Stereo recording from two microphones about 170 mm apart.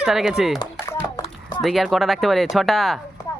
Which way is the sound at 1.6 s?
Centre (ahead or behind).